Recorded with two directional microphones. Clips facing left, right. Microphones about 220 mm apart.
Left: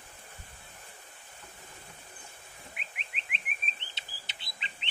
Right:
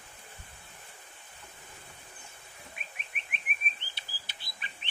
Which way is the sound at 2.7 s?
20° left (ahead or behind).